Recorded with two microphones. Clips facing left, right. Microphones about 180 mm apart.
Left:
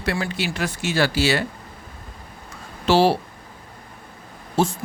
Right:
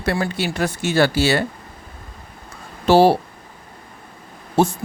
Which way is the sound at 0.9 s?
55° right (ahead or behind).